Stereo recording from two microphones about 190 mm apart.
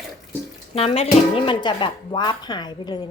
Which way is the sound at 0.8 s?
30° left (ahead or behind).